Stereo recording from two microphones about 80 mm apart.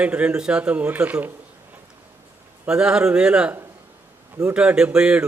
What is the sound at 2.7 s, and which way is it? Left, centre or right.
Speech, centre.